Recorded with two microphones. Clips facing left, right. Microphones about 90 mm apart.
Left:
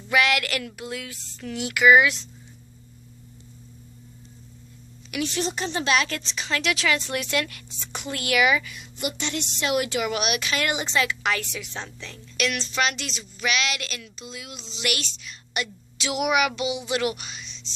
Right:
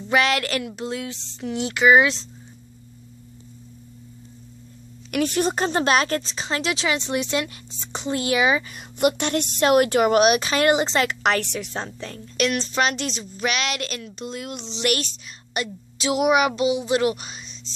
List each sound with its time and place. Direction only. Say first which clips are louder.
0.1 s a woman's voice: right 2 dB; 30° right (ahead or behind)
5.1 s a woman's voice: right 6 dB; 50° right (ahead or behind); by 8.7 s 30° right (ahead or behind)
8.7 s speech: right 10 dB; 55° right (ahead or behind)
14.8 s a woman's voice: right 6 dB; 40° right (ahead or behind)